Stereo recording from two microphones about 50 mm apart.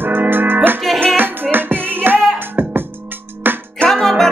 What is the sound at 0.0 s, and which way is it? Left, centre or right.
Music, right.